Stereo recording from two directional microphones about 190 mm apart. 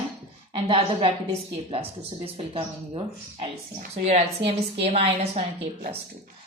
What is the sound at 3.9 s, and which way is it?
A woman's voice, 35° right (ahead or behind).